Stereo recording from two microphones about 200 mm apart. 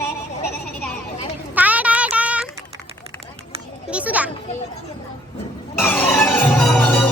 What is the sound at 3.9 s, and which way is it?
Children playing, 5° right (ahead or behind).